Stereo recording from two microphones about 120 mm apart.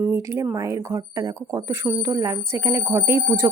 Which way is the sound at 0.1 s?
25° right (ahead or behind).